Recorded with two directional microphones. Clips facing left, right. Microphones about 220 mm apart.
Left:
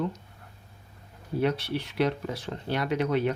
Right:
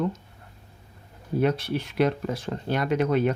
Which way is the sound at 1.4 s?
50° right (ahead or behind).